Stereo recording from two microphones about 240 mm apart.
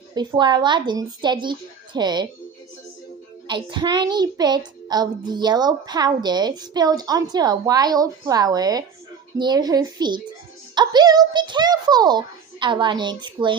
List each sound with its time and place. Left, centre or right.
0.1 s a woman's voice: centre
3.4 s a child's voice: centre